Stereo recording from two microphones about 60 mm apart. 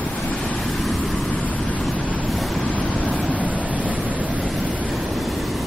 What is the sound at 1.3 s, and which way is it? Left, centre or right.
Vehicle, left.